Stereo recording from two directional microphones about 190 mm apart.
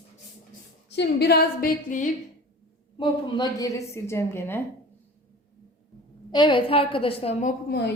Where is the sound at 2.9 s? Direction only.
25° left (ahead or behind).